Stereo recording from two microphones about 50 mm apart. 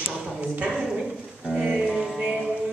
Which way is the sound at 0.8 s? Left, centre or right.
Centre.